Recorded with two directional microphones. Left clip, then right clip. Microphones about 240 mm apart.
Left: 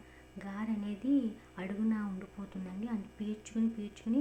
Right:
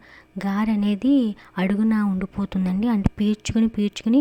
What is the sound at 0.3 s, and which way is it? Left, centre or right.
Speech, right.